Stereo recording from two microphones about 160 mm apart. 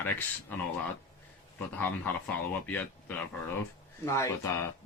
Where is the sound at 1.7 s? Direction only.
10° left (ahead or behind).